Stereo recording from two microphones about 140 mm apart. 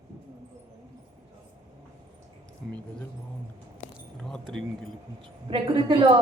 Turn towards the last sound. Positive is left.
turn(degrees=-40)  # may be behind; listen again after turning